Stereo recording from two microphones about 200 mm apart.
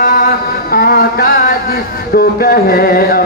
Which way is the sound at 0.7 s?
45° left (ahead or behind).